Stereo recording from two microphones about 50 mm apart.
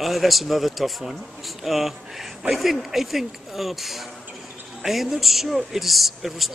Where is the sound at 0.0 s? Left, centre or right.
Centre.